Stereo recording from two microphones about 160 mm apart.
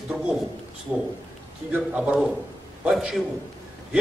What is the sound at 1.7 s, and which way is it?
A man's voice, 5° right (ahead or behind).